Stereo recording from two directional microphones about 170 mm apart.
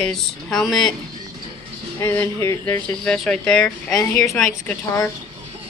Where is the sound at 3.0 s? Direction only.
5° left (ahead or behind).